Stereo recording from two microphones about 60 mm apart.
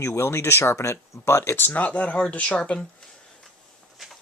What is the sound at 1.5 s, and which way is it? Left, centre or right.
Speech, left.